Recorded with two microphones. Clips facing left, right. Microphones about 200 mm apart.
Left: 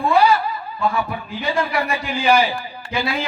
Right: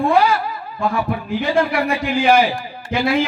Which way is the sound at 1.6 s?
55° right (ahead or behind).